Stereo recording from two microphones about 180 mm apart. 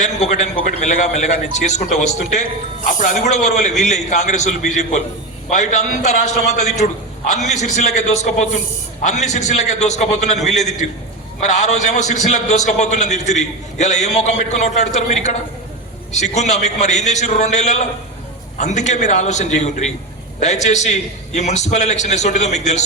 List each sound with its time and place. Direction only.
0.0 s a man's voice: 40° left (ahead or behind)